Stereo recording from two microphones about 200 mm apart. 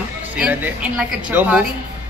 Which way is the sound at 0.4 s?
10° right (ahead or behind).